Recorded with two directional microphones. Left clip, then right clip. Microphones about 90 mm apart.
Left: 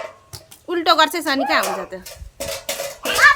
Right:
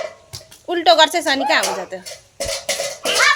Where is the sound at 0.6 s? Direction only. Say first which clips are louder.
Right 3 dB; 55° left (ahead or behind).